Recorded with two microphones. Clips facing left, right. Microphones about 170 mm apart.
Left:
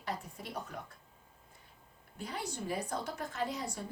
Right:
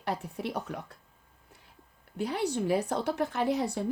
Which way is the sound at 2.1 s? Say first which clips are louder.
Right 10 dB; 70° right (ahead or behind).